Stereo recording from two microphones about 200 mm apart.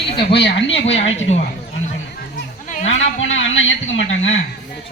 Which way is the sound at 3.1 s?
75° left (ahead or behind).